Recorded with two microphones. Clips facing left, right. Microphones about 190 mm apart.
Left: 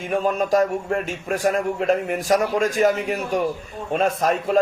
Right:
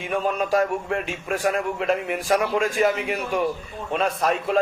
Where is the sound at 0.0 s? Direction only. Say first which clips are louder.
Left 3 dB; 40° left (ahead or behind).